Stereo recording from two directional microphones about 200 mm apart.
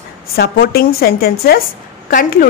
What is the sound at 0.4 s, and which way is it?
A woman's voice, 50° left (ahead or behind).